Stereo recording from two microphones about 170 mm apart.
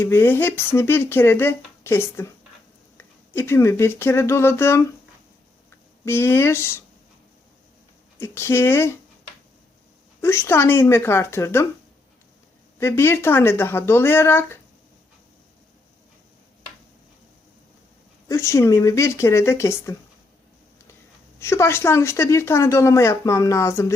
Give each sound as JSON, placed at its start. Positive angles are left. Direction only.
{"t": 0.0, "sound": "a woman's voice", "side_deg": 15}
{"t": 6.1, "sound": "a woman's voice", "side_deg": 15}
{"t": 8.2, "sound": "a woman's voice", "side_deg": 15}
{"t": 10.2, "sound": "a woman's voice", "side_deg": 15}
{"t": 12.8, "sound": "a woman's voice", "side_deg": 15}
{"t": 18.3, "sound": "a woman's voice", "side_deg": 15}
{"t": 21.3, "sound": "a woman's voice", "side_deg": 15}